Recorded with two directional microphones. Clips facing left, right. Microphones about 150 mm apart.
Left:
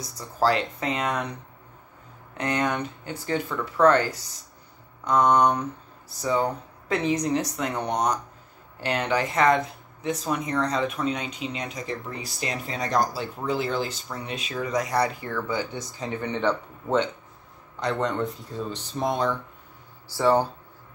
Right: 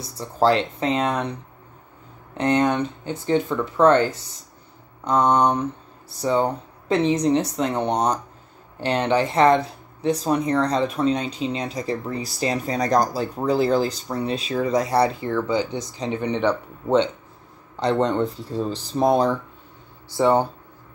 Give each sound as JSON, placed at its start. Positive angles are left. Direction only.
{"t": 0.2, "sound": "speech", "side_deg": -25}
{"t": 2.3, "sound": "speech", "side_deg": -30}
{"t": 17.7, "sound": "speech", "side_deg": -30}
{"t": 20.1, "sound": "speech", "side_deg": -20}